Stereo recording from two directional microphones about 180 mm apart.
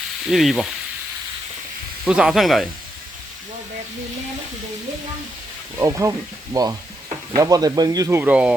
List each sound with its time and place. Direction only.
0.3 s speech: centre (ahead or behind)
2.0 s speech: 5° right (ahead or behind)
5.7 s speech: 15° right (ahead or behind)